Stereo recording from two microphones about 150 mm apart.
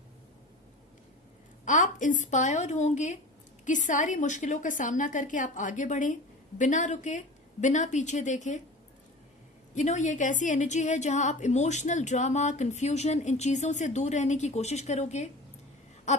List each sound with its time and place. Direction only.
1.6 s a woman's voice: 55° left (ahead or behind)
9.7 s a woman's voice: 55° left (ahead or behind)